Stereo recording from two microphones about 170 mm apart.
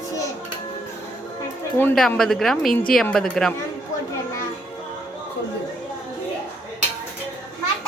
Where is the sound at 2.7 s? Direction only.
55° left (ahead or behind).